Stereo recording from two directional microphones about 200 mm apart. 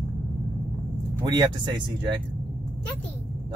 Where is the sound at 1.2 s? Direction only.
20° right (ahead or behind).